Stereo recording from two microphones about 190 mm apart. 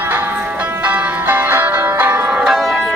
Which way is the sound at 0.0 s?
10° right (ahead or behind).